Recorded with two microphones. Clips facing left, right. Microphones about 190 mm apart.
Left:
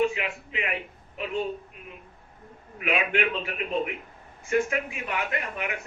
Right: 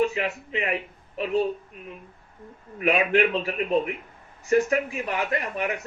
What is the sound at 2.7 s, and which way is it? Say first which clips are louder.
A man's voice: right 5 dB; 40° right (ahead or behind).